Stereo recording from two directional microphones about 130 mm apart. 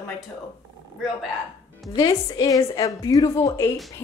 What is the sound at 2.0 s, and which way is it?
A woman's voice, 30° left (ahead or behind).